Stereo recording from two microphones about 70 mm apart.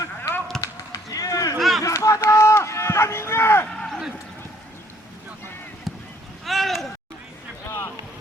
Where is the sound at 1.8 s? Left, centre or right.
Left.